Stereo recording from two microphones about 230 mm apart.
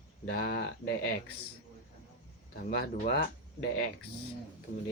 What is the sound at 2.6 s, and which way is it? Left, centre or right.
Speech, left.